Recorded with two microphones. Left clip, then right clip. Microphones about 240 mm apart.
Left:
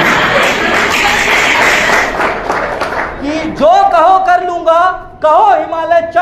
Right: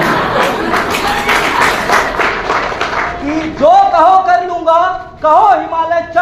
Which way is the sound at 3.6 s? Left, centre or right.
Left.